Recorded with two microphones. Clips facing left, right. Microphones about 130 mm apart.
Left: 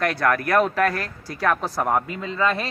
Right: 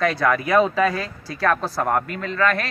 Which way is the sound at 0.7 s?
5° left (ahead or behind).